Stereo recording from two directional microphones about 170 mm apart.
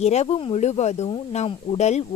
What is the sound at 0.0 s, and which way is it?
Speech, 40° left (ahead or behind).